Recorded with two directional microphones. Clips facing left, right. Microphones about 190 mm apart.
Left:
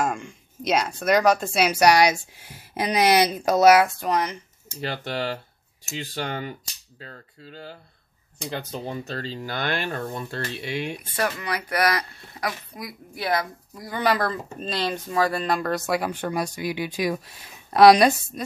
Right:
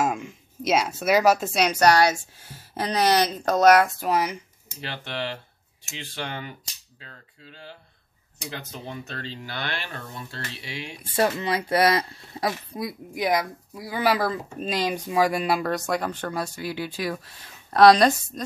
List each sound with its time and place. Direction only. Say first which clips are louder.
0.0 s speech: right 1 dB; 5° right (ahead or behind)
4.8 s speech: left 4 dB; 40° left (ahead or behind); by 11.0 s 55° left (ahead or behind)
11.0 s speech: right 4 dB; 25° right (ahead or behind)
13.1 s speech: right 1 dB; 15° right (ahead or behind); by 18.4 s 10° left (ahead or behind)